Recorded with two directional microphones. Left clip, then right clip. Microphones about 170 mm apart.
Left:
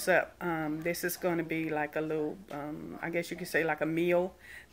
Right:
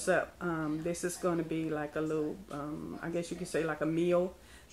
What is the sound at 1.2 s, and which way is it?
Speech, 25° left (ahead or behind).